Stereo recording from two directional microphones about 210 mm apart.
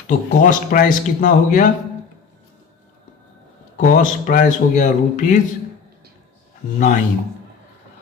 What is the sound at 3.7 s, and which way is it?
Speech, 40° left (ahead or behind).